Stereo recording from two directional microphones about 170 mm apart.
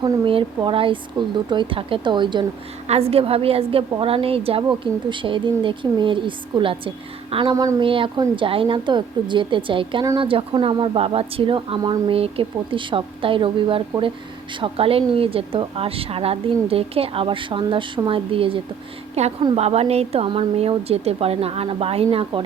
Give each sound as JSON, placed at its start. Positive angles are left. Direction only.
{"t": 0.0, "sound": "a woman's voice", "side_deg": -30}
{"t": 7.5, "sound": "a woman's voice", "side_deg": -20}